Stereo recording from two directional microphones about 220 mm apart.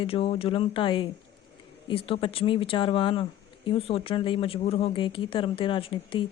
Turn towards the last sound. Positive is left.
turn(degrees=25)  # may be behind; listen again after turning